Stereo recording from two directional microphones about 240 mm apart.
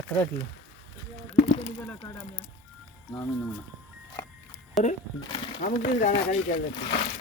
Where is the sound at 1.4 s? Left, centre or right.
Left.